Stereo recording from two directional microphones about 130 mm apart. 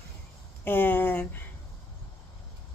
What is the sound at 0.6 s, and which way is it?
Speech, 15° left (ahead or behind).